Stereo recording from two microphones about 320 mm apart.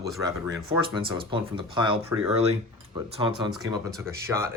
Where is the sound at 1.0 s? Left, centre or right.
Centre.